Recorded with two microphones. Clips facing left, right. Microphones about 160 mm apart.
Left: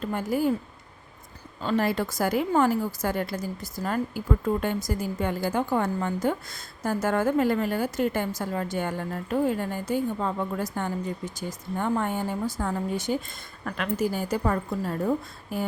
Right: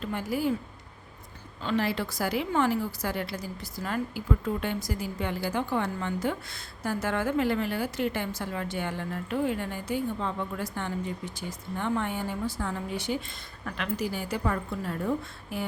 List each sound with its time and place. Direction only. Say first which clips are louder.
0.0 s a woman's voice: left 4 dB; 45° left (ahead or behind)
1.6 s a woman's voice: left 3 dB; 45° left (ahead or behind)